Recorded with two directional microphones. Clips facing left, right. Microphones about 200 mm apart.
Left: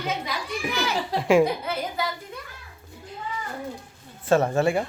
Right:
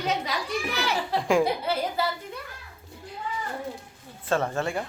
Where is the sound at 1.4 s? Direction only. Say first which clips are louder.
Left 2 dB; 30° right (ahead or behind).